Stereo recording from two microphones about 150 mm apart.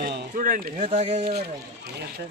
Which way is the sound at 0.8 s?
40° right (ahead or behind).